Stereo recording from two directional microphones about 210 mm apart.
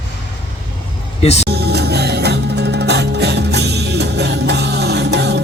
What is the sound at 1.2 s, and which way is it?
Speech, 30° left (ahead or behind).